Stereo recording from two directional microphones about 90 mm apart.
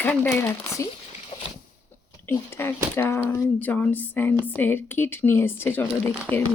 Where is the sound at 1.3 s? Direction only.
70° left (ahead or behind).